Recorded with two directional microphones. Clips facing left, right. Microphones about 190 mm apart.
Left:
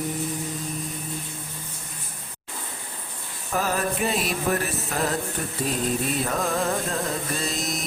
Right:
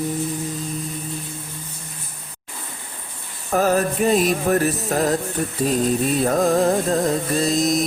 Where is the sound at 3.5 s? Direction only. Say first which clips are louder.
Right 7 dB; 45° right (ahead or behind).